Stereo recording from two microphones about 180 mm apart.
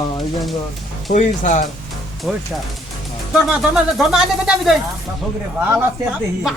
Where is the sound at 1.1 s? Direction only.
40° left (ahead or behind).